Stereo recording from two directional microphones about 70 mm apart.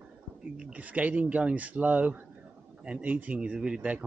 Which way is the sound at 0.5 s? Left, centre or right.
Centre.